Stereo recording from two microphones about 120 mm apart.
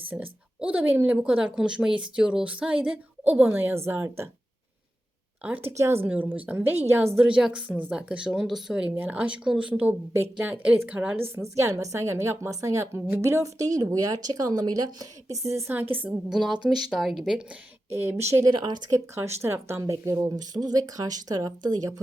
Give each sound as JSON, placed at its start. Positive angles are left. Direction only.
{"t": 0.1, "sound": "speech", "side_deg": -15}
{"t": 5.4, "sound": "a woman's voice", "side_deg": -15}
{"t": 7.3, "sound": "speech", "side_deg": -5}
{"t": 11.6, "sound": "a woman's voice", "side_deg": -25}
{"t": 16.3, "sound": "speech", "side_deg": 0}
{"t": 17.9, "sound": "a woman's voice", "side_deg": -20}
{"t": 18.5, "sound": "speech", "side_deg": -40}
{"t": 18.9, "sound": "speech", "side_deg": -25}